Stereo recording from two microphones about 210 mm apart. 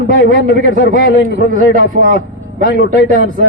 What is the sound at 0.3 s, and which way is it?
A man's voice, 40° right (ahead or behind).